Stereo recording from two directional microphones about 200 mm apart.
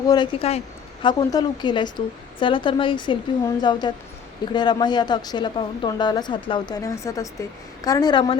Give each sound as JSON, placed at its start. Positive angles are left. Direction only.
{"t": 0.0, "sound": "a woman's voice", "side_deg": 20}